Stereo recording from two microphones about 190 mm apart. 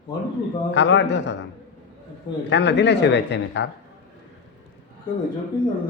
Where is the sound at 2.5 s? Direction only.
65° left (ahead or behind).